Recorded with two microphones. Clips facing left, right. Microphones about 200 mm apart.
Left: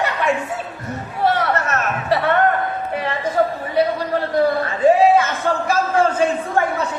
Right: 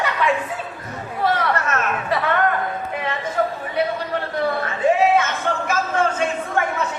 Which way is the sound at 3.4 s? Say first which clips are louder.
Left 4 dB; 35° left (ahead or behind).